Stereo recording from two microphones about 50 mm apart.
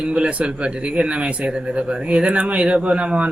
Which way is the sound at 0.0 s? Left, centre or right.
Centre.